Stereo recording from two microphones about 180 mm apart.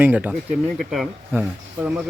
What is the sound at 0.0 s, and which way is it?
Speech, 10° right (ahead or behind).